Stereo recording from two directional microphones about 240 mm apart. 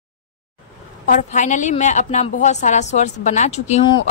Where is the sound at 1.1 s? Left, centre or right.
Left.